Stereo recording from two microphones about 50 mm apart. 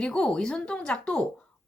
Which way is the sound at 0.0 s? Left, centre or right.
Left.